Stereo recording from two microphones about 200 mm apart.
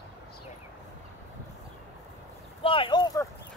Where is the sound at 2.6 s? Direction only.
25° left (ahead or behind).